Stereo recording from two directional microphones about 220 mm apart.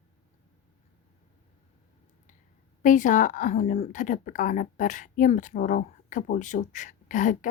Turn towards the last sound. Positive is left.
turn(degrees=35)  # may be behind; listen again after turning